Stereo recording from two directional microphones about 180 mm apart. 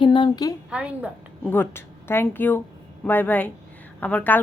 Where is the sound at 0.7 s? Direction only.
5° right (ahead or behind).